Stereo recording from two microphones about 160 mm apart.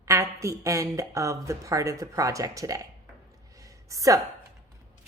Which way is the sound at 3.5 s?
20° right (ahead or behind).